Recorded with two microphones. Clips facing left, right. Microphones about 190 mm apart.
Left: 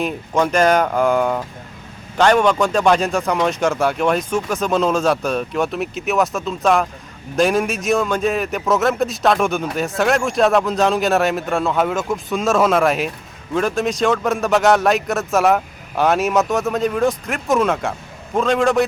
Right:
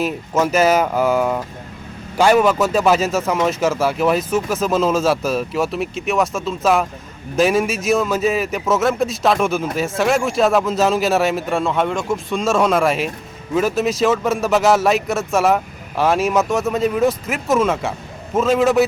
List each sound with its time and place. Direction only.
0.0 s a man's voice: 5° right (ahead or behind)